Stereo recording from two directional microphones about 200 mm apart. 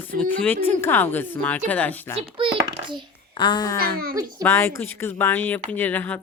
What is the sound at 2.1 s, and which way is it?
Speech, 25° right (ahead or behind).